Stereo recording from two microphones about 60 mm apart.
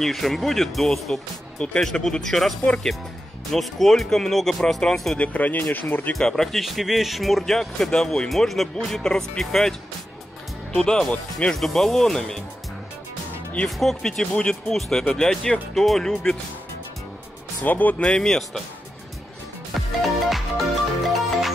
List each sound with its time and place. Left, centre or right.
0.0 s speech: centre
1.1 s speech: centre
2.6 s speech: centre
3.5 s speech: centre
5.1 s speech: left
6.1 s speech: centre
13.7 s speech: centre
17.6 s speech: left
18.0 s speech: centre
19.7 s music: centre